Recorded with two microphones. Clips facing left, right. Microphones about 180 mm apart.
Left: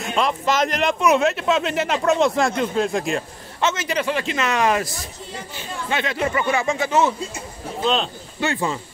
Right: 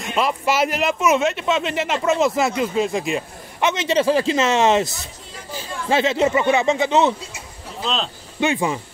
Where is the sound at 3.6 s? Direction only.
20° right (ahead or behind).